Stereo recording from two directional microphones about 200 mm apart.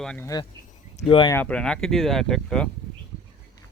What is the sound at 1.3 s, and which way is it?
Speech, 5° left (ahead or behind).